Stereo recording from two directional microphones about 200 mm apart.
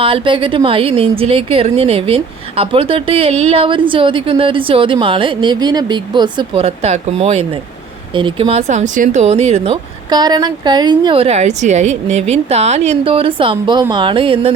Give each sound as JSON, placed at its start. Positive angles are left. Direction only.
{"t": 0.0, "sound": "a woman's voice", "side_deg": -25}